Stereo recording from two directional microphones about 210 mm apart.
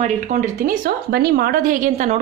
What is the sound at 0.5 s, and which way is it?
A woman's voice, 45° right (ahead or behind).